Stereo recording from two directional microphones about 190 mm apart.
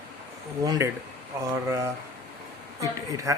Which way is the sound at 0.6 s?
15° right (ahead or behind).